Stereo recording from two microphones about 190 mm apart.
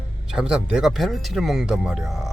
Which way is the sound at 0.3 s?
5° right (ahead or behind).